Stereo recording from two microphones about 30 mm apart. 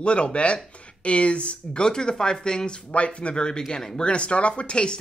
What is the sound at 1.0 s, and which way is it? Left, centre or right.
Whip, left.